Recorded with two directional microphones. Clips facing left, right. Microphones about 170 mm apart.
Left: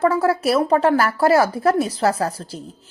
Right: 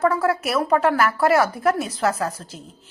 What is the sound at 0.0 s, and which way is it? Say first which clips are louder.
Speech: left 3 dB; 30° left (ahead or behind).